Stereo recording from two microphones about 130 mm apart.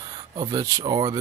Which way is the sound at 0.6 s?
25° right (ahead or behind).